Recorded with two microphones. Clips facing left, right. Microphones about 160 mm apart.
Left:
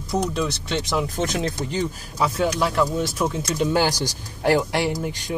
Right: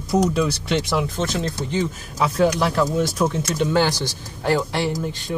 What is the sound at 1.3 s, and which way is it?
Speech, 20° left (ahead or behind).